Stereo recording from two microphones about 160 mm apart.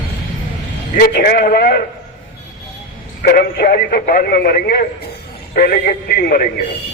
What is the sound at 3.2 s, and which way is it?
A man's voice, 75° left (ahead or behind).